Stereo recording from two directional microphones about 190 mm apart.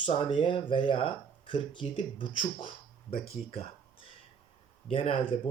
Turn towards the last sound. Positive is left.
turn(degrees=25)  # may be behind; listen again after turning